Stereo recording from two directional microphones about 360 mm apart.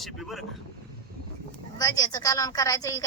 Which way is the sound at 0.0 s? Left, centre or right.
Centre.